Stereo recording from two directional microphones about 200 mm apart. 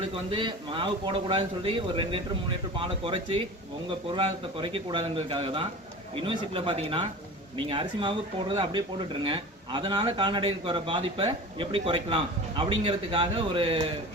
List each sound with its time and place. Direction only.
0.3 s speech: 25° right (ahead or behind)